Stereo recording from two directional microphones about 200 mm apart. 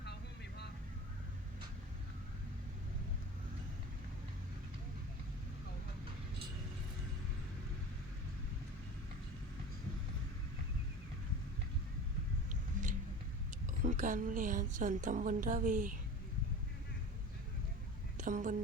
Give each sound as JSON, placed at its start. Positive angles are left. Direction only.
{"t": 0.0, "sound": "vehicle", "side_deg": 55}
{"t": 12.8, "sound": "a sound", "side_deg": -40}
{"t": 13.8, "sound": "speech", "side_deg": -40}
{"t": 18.2, "sound": "speech", "side_deg": -40}